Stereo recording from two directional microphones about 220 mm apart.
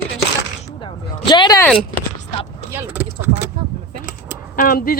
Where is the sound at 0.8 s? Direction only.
20° left (ahead or behind).